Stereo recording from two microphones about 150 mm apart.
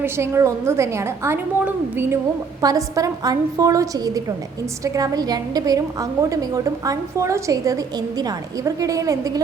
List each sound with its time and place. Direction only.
0.0 s a woman's voice: 20° right (ahead or behind)